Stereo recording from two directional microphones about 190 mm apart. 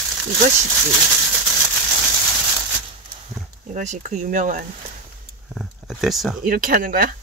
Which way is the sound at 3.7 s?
40° right (ahead or behind).